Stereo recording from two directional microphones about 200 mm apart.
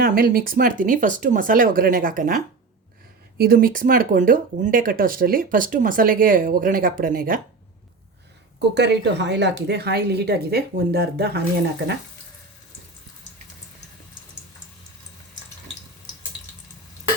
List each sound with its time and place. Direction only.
0.0 s speech: 45° right (ahead or behind)
8.5 s speech: 60° right (ahead or behind)